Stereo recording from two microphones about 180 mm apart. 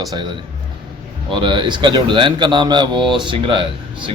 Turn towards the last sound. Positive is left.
turn(degrees=-30)  # may be behind; listen again after turning